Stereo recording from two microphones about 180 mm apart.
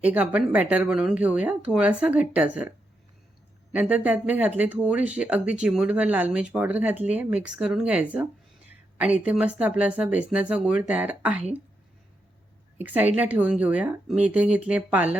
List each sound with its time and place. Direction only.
0.0 s speech: 10° right (ahead or behind)
3.7 s speech: 10° right (ahead or behind)
12.8 s speech: 10° right (ahead or behind)